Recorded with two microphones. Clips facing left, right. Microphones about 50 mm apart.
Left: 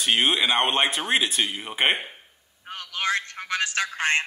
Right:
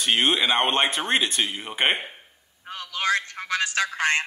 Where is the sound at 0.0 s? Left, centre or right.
Centre.